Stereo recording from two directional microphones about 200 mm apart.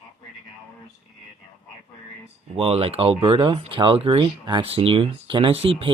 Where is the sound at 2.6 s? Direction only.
30° right (ahead or behind).